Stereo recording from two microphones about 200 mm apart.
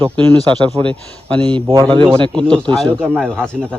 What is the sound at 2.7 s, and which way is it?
Speech, centre (ahead or behind).